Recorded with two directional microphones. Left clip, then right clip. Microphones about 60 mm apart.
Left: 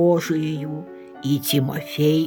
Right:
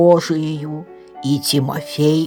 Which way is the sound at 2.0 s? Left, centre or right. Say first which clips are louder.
Right 3 dB; centre.